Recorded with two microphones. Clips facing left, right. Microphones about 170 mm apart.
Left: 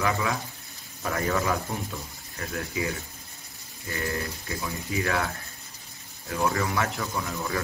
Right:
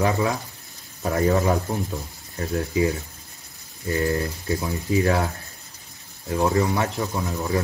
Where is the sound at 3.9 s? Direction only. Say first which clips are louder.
Right 8 dB; 35° right (ahead or behind).